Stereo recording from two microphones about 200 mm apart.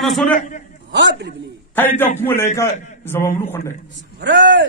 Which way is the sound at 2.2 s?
10° left (ahead or behind).